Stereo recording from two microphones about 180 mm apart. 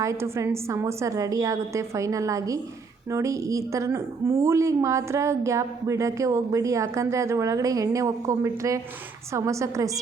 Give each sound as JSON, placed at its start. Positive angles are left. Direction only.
{"t": 0.0, "sound": "a woman's voice", "side_deg": -15}